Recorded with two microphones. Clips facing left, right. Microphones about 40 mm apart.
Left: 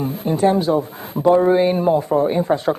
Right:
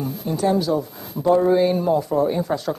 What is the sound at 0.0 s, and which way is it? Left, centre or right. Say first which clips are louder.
A man's voice: left 5 dB; left.